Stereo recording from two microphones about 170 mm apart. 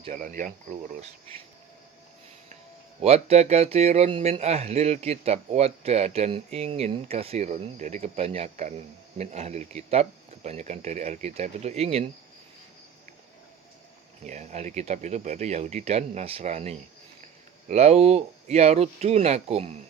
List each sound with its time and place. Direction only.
0.1 s speech: 50° right (ahead or behind)
3.0 s speech: 40° right (ahead or behind)
14.3 s speech: 45° right (ahead or behind)